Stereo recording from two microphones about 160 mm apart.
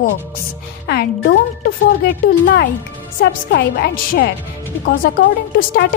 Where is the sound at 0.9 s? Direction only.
85° left.